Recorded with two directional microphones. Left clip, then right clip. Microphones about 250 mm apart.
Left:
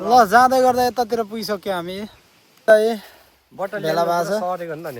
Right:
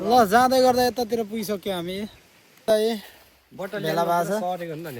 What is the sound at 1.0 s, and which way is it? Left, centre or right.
Speech, centre.